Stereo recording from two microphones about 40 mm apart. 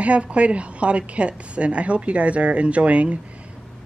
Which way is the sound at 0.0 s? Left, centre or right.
Right.